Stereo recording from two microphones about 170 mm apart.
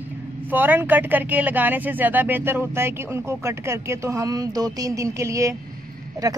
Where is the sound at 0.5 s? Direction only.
10° right (ahead or behind).